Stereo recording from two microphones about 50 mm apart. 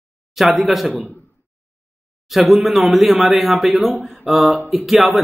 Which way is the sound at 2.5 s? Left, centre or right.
Centre.